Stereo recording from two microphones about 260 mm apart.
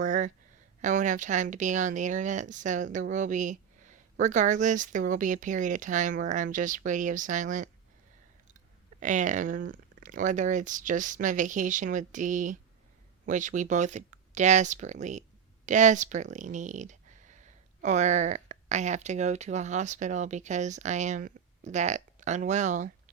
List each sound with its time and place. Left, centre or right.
0.0 s a sound: right
0.8 s speech: right
9.0 s speech: right